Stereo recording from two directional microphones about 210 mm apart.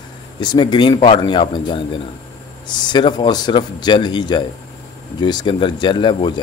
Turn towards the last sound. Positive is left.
turn(degrees=25)  # may be behind; listen again after turning